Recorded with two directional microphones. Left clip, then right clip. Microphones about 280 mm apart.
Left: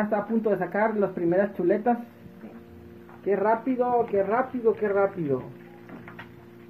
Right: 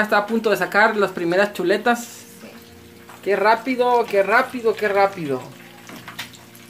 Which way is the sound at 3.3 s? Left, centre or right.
Centre.